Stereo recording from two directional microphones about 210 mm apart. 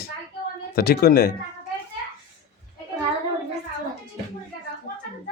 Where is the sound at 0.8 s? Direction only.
45° left (ahead or behind).